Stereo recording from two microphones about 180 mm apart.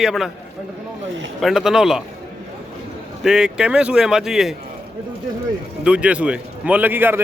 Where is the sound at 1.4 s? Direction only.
Centre (ahead or behind).